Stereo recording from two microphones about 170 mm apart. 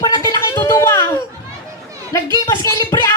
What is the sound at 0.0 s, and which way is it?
Music, 20° left (ahead or behind).